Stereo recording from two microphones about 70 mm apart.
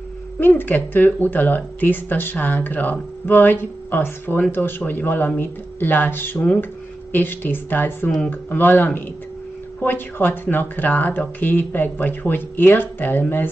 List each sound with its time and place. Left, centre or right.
0.4 s speech: left